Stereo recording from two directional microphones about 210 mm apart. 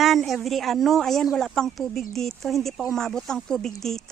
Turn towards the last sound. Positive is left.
turn(degrees=0)  # may be behind; listen again after turning